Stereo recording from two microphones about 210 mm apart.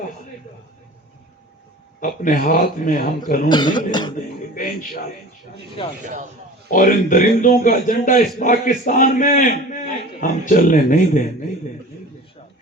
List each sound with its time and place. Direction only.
2.0 s a man's voice: 40° left (ahead or behind)
3.5 s cough: 20° left (ahead or behind)
4.5 s a man's voice: 40° left (ahead or behind)
5.8 s cough: 25° left (ahead or behind)
6.7 s a man's voice: 40° left (ahead or behind)